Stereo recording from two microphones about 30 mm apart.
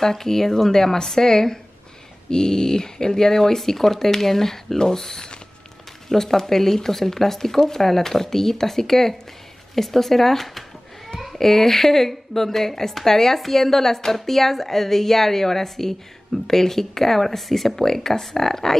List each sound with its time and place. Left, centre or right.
0.0 s speech: centre